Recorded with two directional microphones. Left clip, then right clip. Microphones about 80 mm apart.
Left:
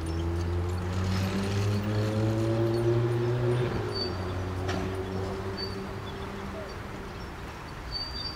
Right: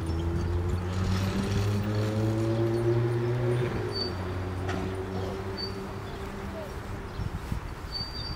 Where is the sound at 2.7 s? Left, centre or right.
Left.